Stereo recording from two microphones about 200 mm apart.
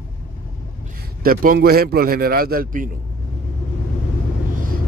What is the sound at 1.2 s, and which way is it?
Speech, 45° right (ahead or behind).